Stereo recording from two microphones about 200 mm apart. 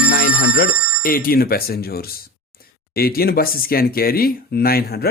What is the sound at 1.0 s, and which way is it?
Speech, 45° left (ahead or behind).